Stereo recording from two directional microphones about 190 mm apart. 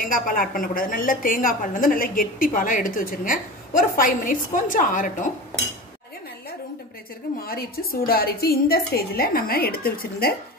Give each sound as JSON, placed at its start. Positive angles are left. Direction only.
{"t": 0.0, "sound": "a woman's voice", "side_deg": 50}
{"t": 7.4, "sound": "a woman's voice", "side_deg": 50}